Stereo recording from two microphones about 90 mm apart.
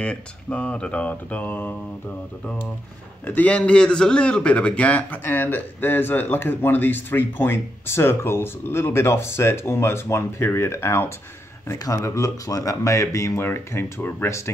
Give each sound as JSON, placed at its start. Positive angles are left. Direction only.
{"t": 0.0, "sound": "speech", "side_deg": 15}
{"t": 3.3, "sound": "a man's voice", "side_deg": 15}